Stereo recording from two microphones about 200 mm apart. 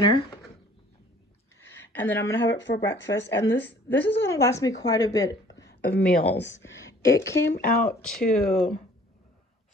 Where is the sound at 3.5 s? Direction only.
10° left (ahead or behind).